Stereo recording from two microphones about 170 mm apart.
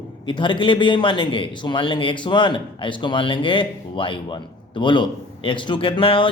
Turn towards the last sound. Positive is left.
turn(degrees=30)  # may be behind; listen again after turning